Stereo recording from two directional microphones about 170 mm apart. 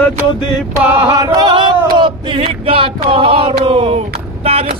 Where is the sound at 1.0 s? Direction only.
20° right (ahead or behind).